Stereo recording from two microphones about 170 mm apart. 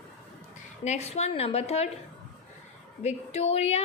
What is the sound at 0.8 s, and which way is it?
A woman's voice, 40° left (ahead or behind).